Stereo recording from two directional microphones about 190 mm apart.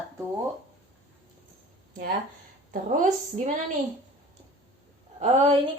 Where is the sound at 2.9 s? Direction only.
45° right (ahead or behind).